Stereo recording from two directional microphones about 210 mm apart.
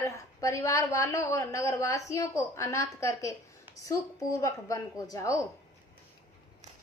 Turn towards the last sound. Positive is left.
turn(degrees=15)  # may be behind; listen again after turning